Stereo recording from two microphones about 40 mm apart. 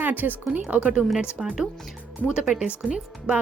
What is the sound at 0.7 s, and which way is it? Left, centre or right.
Speech, right.